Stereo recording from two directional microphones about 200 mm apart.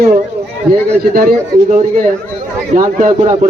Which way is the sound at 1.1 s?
45° right (ahead or behind).